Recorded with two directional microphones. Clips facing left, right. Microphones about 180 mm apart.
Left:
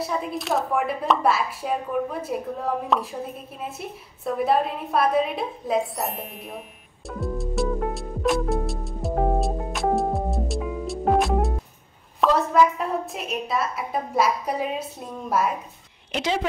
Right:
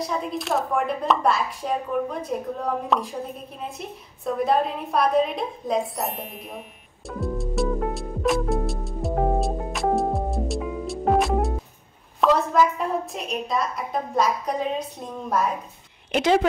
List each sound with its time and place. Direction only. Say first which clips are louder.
0.0 s a woman's voice: even; 5° left (ahead or behind)
7.1 s music: right 1 dB; centre (ahead or behind)
12.2 s a woman's voice: even; centre (ahead or behind)
16.1 s speech: right 6 dB; 55° right (ahead or behind)